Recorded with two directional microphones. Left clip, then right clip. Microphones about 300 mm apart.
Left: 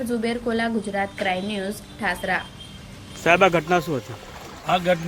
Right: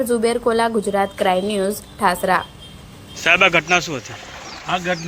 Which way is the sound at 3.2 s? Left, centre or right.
Centre.